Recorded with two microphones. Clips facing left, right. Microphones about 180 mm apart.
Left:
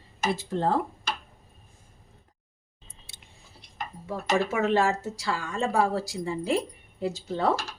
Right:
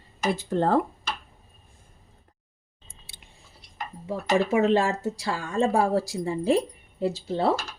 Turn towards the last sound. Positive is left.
turn(degrees=-30)  # may be behind; listen again after turning